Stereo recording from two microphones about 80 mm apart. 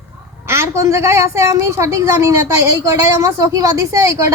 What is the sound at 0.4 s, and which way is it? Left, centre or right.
A woman's voice, right.